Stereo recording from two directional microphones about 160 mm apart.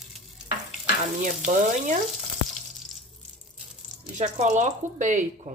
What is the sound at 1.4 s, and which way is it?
Speech, 55° right (ahead or behind).